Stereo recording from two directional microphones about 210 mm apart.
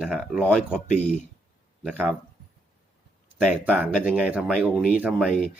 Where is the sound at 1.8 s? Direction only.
Centre (ahead or behind).